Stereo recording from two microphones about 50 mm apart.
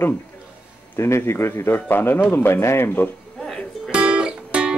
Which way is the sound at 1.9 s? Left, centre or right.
Left.